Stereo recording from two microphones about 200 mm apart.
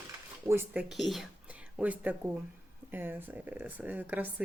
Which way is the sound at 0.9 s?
Centre (ahead or behind).